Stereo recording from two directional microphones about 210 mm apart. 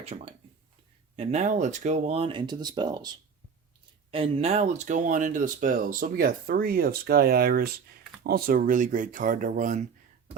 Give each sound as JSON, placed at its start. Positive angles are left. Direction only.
{"t": 0.0, "sound": "speech", "side_deg": -30}